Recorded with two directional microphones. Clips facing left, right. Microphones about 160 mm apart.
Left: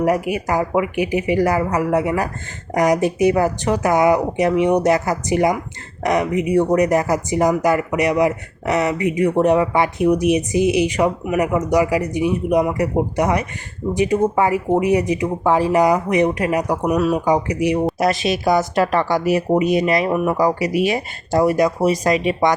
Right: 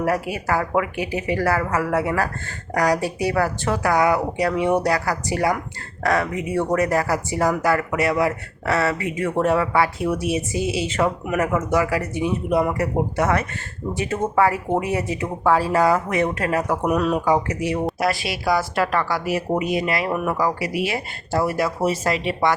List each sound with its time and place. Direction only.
0.0 s speech: 15° left (ahead or behind)
16.8 s speech: centre (ahead or behind)
17.2 s speech: 15° left (ahead or behind)